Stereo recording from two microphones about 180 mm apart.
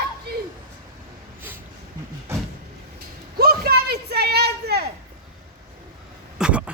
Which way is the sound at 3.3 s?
60° right (ahead or behind).